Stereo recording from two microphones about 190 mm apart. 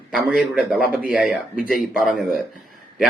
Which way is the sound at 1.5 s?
50° left (ahead or behind).